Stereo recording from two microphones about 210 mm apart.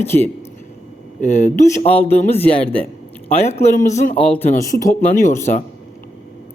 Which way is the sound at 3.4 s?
30° left (ahead or behind).